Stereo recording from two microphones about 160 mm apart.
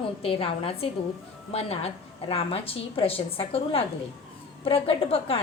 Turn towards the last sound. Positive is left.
turn(degrees=35)  # may be behind; listen again after turning